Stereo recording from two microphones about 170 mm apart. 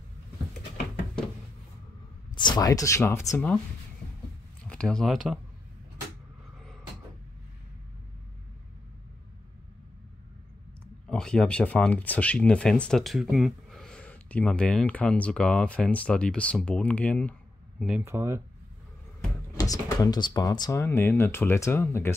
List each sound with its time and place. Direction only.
2.3 s speech: 25° left (ahead or behind)
4.6 s speech: 5° left (ahead or behind)
11.1 s speech: 5° left (ahead or behind)
18.0 s speech: 15° right (ahead or behind)
19.5 s speech: 20° left (ahead or behind)